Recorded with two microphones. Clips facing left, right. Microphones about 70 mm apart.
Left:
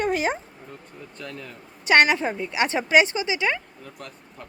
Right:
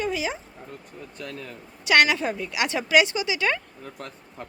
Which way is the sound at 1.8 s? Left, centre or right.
Left.